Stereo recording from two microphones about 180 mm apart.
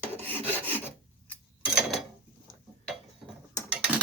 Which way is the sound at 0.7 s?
10° left (ahead or behind).